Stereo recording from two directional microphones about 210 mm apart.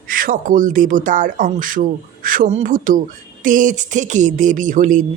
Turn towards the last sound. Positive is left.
turn(degrees=-40)  # may be behind; listen again after turning